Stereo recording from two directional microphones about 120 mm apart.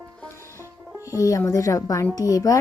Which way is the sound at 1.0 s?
30° left (ahead or behind).